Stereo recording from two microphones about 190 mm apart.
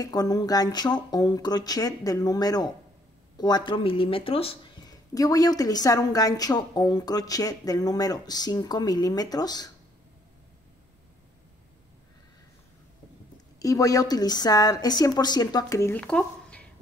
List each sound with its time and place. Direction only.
0.0 s speech: 20° left (ahead or behind)
13.6 s speech: 20° left (ahead or behind)